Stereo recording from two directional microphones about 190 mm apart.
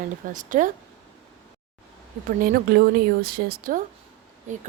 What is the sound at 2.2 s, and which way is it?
A woman's voice, 50° right (ahead or behind).